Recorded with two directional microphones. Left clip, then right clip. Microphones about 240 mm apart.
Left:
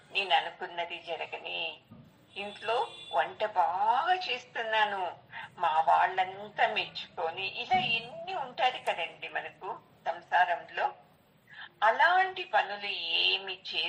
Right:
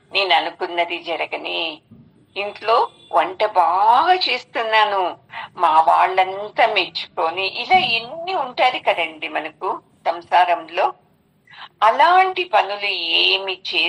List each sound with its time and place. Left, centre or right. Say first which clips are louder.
0.1 s speech: right 11 dB; right